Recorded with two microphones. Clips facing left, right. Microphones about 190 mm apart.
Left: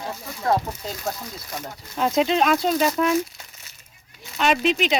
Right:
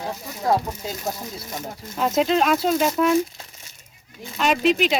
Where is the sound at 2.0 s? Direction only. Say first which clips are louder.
Even; centre (ahead or behind).